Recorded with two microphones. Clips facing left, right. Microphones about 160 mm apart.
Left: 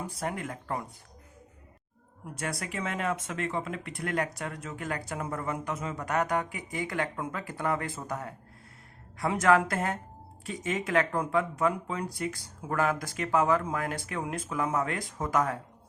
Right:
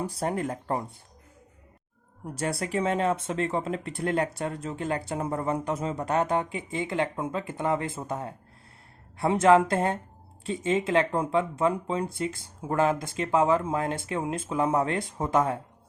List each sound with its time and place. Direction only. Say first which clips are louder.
0.0 s speech: right 6 dB; 35° right (ahead or behind)
2.2 s speech: right 5 dB; 35° right (ahead or behind)